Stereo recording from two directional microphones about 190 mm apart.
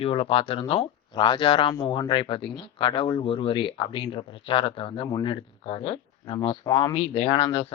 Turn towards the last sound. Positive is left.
turn(degrees=25)  # may be behind; listen again after turning